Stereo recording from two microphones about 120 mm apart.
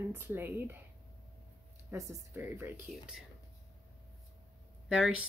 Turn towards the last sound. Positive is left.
turn(degrees=-5)  # may be behind; listen again after turning